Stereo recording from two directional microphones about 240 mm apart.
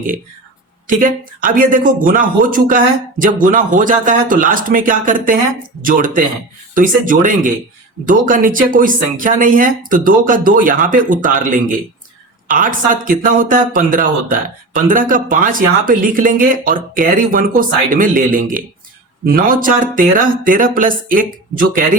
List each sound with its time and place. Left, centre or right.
0.9 s speech: right